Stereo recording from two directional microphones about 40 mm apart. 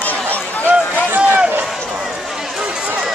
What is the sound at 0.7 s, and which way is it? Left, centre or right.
Run, right.